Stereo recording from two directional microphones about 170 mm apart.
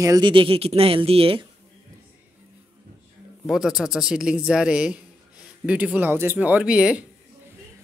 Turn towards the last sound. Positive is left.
turn(degrees=-5)  # may be behind; listen again after turning